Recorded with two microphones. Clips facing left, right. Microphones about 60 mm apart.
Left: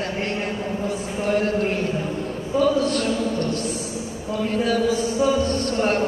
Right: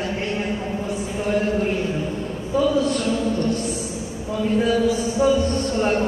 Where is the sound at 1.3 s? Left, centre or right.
Left.